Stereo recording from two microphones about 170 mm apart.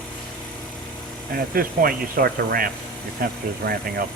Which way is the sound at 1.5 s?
60° right (ahead or behind).